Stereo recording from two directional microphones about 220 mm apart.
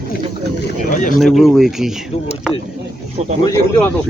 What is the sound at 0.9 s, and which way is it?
Speech, 35° left (ahead or behind).